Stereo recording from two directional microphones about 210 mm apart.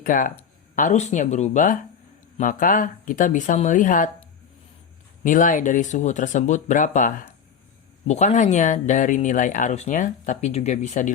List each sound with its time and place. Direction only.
0.0 s speech: 40° left (ahead or behind)
5.2 s speech: 40° left (ahead or behind)